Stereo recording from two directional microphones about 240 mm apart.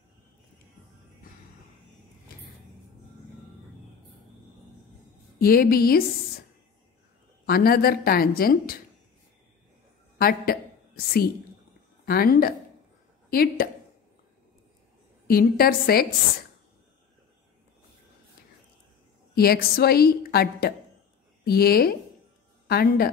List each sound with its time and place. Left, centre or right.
5.4 s a woman's voice: left
7.4 s a woman's voice: left
10.1 s a man's voice: left
12.1 s a woman's voice: left
15.2 s a woman's voice: left
19.3 s a woman's voice: left